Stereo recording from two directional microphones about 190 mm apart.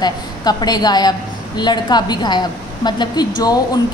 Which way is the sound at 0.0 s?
20° left (ahead or behind).